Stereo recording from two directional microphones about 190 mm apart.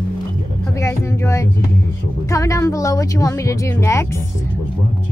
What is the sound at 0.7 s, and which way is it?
Speech, 15° left (ahead or behind).